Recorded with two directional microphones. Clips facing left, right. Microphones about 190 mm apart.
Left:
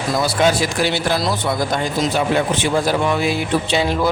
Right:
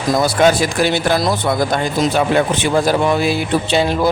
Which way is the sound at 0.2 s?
50° right (ahead or behind).